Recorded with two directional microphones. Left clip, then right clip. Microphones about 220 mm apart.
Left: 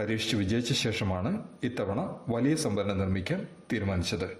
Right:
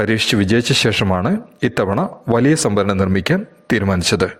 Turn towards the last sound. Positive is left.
turn(degrees=-40)  # may be behind; listen again after turning